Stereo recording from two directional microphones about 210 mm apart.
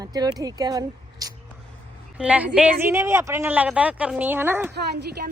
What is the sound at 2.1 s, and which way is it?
Speech, 5° right (ahead or behind).